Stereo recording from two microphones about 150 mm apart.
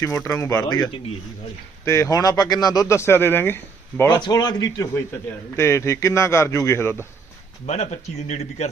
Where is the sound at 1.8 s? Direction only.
20° left (ahead or behind).